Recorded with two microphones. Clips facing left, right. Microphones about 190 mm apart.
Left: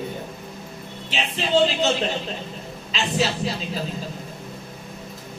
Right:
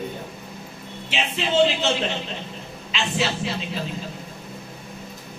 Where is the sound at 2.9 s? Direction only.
40° left (ahead or behind).